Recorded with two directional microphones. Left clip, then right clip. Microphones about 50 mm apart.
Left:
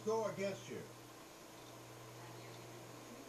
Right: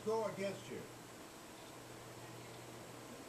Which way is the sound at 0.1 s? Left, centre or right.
Centre.